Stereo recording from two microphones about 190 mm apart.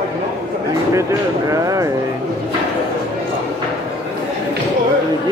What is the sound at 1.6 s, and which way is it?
Speech, 15° right (ahead or behind).